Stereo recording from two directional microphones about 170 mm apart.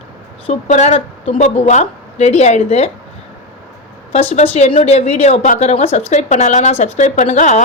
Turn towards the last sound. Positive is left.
turn(degrees=45)  # may be behind; listen again after turning